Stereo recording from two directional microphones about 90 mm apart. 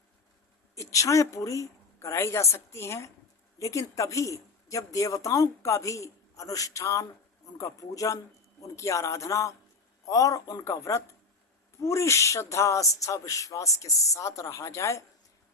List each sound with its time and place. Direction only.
0.8 s speech: 35° left (ahead or behind)